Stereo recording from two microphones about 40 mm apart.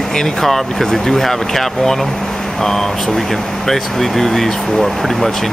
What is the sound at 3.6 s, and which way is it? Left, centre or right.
Speech, centre.